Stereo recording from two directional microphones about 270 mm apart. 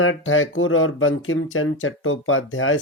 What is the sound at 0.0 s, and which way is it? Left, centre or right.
Speech, left.